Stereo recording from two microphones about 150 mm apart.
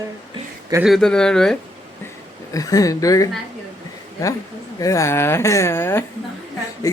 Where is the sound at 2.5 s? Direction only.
25° left (ahead or behind).